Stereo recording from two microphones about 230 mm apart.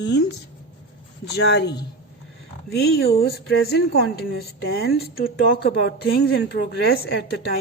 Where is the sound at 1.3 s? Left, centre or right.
Left.